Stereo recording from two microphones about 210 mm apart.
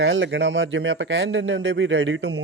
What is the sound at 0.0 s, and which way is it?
Speech, 65° right (ahead or behind).